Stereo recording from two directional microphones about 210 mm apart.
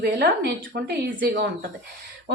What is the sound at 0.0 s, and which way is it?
A woman's voice, 50° right (ahead or behind).